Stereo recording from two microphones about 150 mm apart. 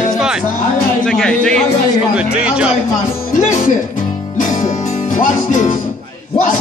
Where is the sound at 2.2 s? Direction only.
10° right (ahead or behind).